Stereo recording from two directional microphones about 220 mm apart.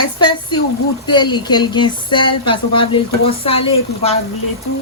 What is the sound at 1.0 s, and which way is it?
Speech, 20° left (ahead or behind).